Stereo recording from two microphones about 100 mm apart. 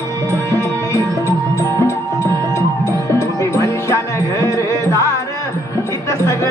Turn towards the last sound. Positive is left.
turn(degrees=30)  # may be behind; listen again after turning